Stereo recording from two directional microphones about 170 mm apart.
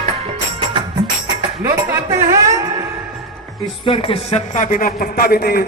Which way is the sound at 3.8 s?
35° left (ahead or behind).